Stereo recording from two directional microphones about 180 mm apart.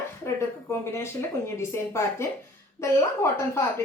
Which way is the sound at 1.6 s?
15° left (ahead or behind).